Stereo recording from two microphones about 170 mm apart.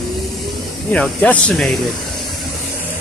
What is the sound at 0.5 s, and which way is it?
Speech, 5° left (ahead or behind).